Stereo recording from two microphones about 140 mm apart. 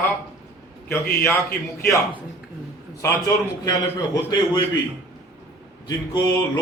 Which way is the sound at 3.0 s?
20° left (ahead or behind).